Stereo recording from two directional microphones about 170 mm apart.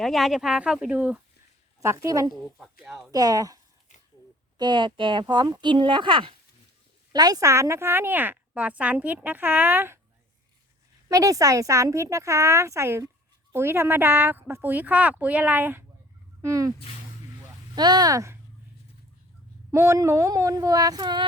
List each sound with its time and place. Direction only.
0.0 s a woman's voice: centre (ahead or behind); by 2.3 s 20° right (ahead or behind)
2.8 s speech: 5° right (ahead or behind)
3.1 s a woman's voice: 20° right (ahead or behind)
11.1 s a woman's voice: 20° right (ahead or behind)
17.7 s speech: 25° right (ahead or behind)
19.7 s speech: 15° right (ahead or behind)